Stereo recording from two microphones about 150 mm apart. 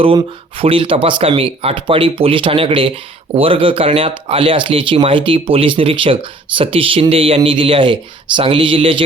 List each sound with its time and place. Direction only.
0.0 s speech: 40° right (ahead or behind)